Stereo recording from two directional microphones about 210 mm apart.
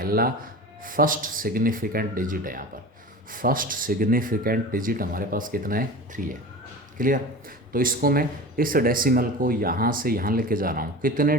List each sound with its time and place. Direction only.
0.0 s speech: 45° right (ahead or behind)